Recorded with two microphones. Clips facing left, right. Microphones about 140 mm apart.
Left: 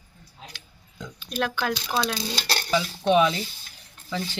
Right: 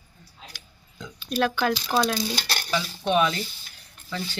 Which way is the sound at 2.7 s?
10° left (ahead or behind).